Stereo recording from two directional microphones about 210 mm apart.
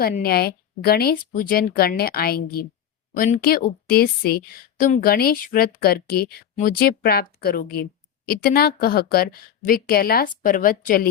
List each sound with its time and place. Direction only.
0.0 s a woman's voice: 45° left (ahead or behind)